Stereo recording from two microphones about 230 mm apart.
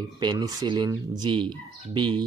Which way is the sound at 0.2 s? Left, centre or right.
Centre.